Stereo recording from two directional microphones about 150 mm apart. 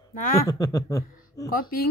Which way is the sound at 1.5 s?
80° left.